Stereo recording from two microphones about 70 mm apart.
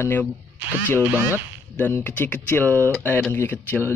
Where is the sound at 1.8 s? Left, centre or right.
Left.